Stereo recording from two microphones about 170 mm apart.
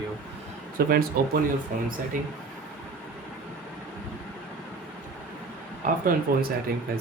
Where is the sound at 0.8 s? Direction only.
60° right (ahead or behind).